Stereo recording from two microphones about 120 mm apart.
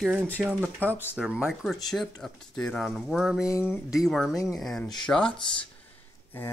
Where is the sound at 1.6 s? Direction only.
Centre (ahead or behind).